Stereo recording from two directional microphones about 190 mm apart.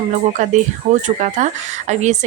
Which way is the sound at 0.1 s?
40° right (ahead or behind).